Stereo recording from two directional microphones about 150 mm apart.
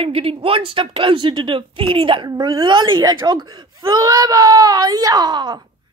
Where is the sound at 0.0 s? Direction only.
40° right (ahead or behind).